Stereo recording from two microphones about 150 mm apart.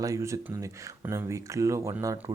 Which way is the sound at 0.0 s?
20° right (ahead or behind).